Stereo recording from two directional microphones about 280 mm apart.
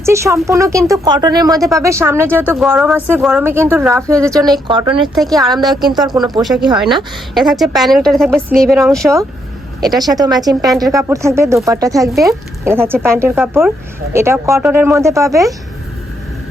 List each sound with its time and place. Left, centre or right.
0.0 s speech: centre
6.4 s a woman's voice: centre
9.8 s speech: centre